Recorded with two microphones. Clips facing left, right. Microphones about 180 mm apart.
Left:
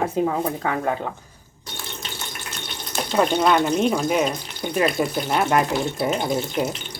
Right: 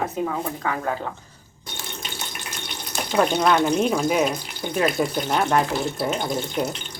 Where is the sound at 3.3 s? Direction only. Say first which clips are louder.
Left 1 dB; 10° left (ahead or behind).